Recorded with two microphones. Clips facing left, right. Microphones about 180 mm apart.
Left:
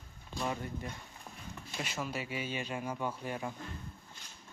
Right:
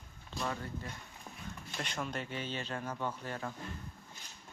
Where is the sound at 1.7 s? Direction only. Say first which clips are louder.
Left 1 dB; 5° left (ahead or behind).